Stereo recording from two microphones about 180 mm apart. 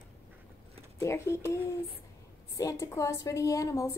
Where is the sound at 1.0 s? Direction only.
15° left (ahead or behind).